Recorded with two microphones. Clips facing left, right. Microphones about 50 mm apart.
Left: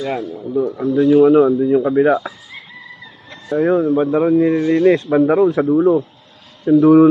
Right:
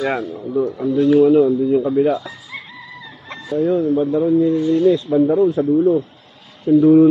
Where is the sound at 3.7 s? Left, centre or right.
Left.